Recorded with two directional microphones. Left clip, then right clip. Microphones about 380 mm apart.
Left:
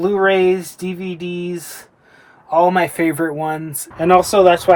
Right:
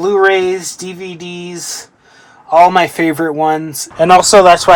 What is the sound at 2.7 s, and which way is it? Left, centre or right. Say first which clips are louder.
Speech: right 4 dB; centre.